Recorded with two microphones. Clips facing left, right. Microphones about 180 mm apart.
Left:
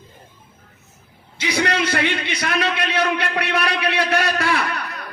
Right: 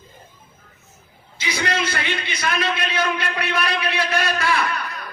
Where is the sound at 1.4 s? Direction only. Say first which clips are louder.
Left 3 dB; 65° left (ahead or behind).